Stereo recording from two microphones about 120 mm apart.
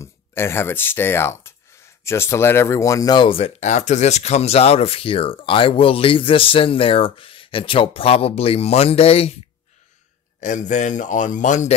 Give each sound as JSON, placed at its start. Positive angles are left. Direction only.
{"t": 0.0, "sound": "speech", "side_deg": 20}
{"t": 3.3, "sound": "speech", "side_deg": 55}
{"t": 10.4, "sound": "speech", "side_deg": 90}